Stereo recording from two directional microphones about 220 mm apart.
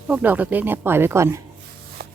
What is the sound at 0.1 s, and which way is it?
Speech, 10° right (ahead or behind).